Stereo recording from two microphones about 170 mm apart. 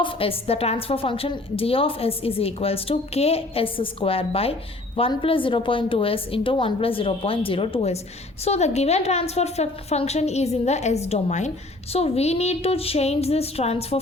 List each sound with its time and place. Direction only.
0.0 s a woman's voice: 35° left (ahead or behind)